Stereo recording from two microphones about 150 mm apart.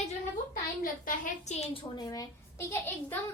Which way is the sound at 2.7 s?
15° left (ahead or behind).